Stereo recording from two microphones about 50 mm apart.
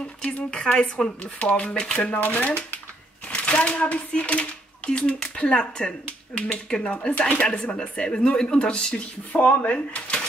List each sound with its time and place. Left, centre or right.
0.2 s a sound: left
0.5 s speech: centre
9.3 s speech: left